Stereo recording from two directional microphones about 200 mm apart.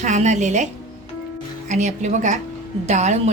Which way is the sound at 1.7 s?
35° right (ahead or behind).